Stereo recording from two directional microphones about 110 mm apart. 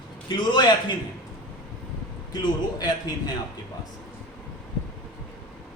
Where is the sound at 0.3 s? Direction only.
45° left (ahead or behind).